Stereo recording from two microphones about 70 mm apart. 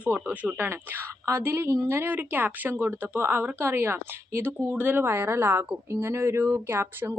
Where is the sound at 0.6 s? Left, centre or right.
Right.